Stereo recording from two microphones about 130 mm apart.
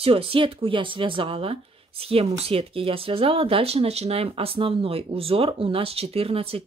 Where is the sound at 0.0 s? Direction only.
45° right (ahead or behind).